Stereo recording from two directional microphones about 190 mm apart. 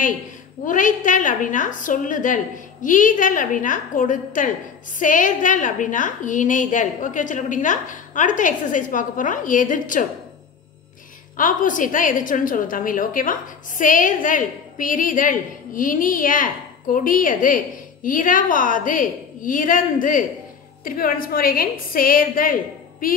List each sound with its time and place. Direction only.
0.7 s a woman's voice: 45° left (ahead or behind)
11.3 s a woman's voice: 45° left (ahead or behind)